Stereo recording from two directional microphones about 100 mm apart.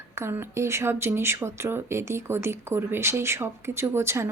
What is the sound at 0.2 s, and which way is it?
A woman's voice, 25° right (ahead or behind).